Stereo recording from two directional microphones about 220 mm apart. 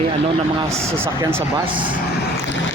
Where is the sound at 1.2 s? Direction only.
20° right (ahead or behind).